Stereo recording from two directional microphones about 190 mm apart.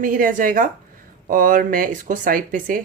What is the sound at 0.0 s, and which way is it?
Speech, 45° right (ahead or behind).